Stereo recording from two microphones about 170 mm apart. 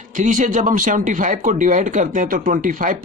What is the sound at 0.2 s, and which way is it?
A man's voice, 50° right (ahead or behind).